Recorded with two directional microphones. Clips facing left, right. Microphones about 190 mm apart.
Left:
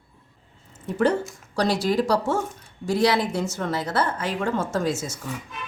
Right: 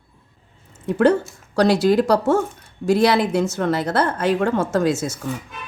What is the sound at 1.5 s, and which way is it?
A woman's voice, 70° right (ahead or behind).